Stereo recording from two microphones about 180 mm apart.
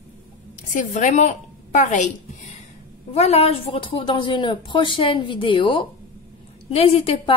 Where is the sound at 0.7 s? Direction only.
45° left (ahead or behind).